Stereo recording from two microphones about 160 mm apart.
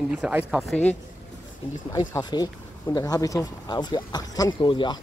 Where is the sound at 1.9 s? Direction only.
20° left (ahead or behind).